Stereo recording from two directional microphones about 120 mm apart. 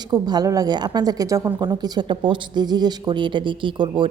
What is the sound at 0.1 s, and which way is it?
A woman's voice, 30° right (ahead or behind).